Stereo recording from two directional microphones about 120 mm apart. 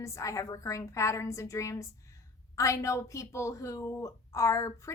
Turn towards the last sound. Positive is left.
turn(degrees=25)  # may be behind; listen again after turning